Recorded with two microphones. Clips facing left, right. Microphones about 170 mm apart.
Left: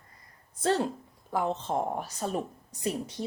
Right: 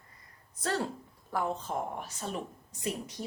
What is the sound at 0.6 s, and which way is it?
A woman's voice, 25° left (ahead or behind).